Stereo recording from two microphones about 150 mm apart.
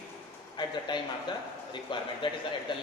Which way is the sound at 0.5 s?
30° left (ahead or behind).